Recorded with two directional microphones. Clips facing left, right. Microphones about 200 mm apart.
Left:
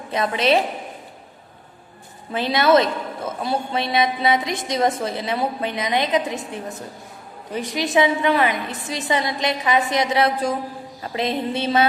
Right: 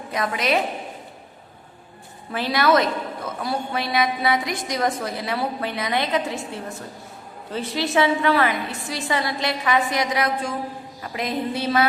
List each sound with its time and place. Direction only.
0.1 s a woman's voice: 25° left (ahead or behind)
2.3 s a woman's voice: 20° left (ahead or behind)